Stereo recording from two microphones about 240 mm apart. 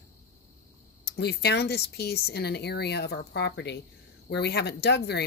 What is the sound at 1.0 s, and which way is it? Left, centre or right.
Speech, left.